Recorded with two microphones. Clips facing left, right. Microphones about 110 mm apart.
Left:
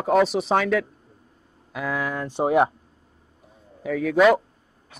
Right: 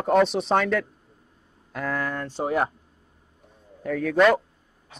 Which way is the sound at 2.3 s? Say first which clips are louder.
Left 7 dB; 20° left (ahead or behind).